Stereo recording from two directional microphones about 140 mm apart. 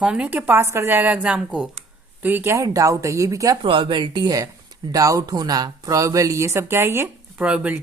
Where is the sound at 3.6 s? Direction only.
35° right (ahead or behind).